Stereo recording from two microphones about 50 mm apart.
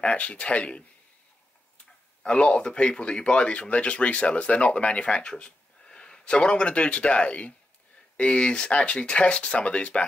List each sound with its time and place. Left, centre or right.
0.0 s speech: left
2.2 s speech: centre